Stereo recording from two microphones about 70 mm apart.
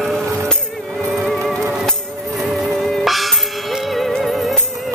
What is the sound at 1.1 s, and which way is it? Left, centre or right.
Music, centre.